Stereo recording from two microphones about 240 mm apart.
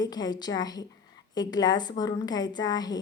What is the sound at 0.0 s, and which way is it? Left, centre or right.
A woman's voice, centre.